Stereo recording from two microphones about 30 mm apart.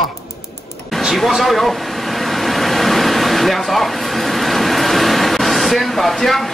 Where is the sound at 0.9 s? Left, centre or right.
Centre.